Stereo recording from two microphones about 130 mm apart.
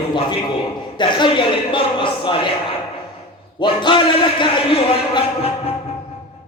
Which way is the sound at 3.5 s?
35° left (ahead or behind).